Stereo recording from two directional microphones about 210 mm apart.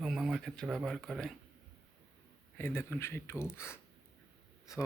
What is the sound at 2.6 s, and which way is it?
Speech, 10° left (ahead or behind).